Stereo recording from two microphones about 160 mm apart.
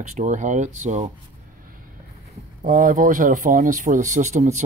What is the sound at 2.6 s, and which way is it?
Speech, 60° right (ahead or behind).